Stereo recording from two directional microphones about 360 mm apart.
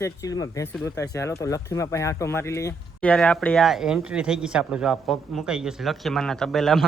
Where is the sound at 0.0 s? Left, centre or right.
Centre.